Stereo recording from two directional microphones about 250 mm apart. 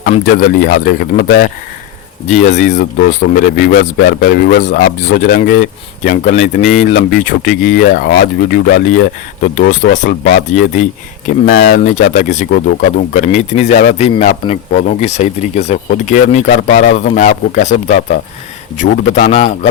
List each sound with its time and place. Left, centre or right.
0.0 s speech: left